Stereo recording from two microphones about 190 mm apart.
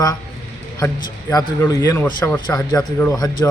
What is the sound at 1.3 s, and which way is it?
A man's voice, 15° left (ahead or behind).